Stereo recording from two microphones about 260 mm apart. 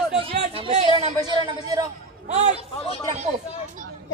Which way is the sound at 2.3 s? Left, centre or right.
Right.